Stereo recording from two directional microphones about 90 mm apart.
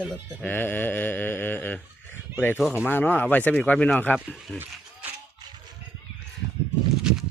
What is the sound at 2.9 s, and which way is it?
Speech, 25° left (ahead or behind).